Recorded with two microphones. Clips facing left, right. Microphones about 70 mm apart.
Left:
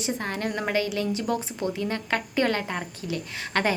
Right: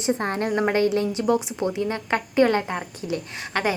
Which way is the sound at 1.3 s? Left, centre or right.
Centre.